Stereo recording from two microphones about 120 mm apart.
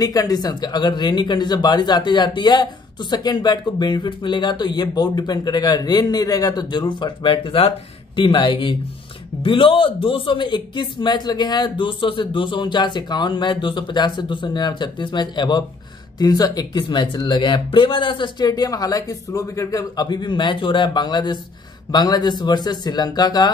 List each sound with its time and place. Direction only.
0.0 s speech: 30° left (ahead or behind)
18.5 s speech: 30° left (ahead or behind)